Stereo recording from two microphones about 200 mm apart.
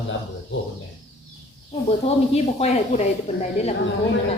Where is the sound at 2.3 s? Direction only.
30° left (ahead or behind).